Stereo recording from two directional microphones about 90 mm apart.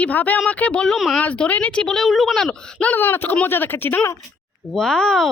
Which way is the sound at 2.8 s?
20° left (ahead or behind).